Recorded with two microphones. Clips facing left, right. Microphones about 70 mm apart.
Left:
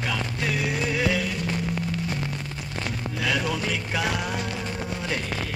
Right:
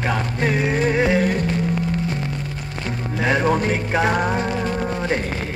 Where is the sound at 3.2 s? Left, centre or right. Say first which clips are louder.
Right 8 dB; right.